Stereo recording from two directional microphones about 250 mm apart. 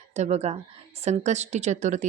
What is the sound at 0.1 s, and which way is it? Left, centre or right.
A woman's voice, right.